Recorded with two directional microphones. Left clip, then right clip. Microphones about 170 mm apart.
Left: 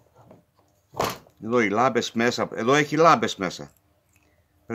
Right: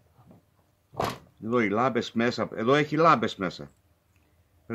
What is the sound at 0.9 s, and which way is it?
Speech, 15° left (ahead or behind).